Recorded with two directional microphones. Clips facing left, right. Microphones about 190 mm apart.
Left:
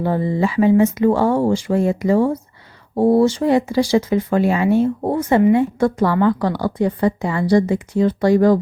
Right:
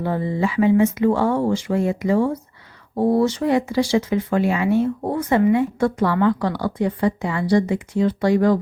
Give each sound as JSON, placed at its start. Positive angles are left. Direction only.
{"t": 0.0, "sound": "speech", "side_deg": 35}